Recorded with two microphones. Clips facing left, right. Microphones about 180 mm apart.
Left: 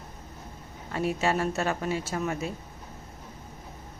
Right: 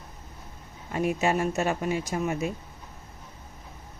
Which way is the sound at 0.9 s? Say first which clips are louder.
Right 2 dB; 15° right (ahead or behind).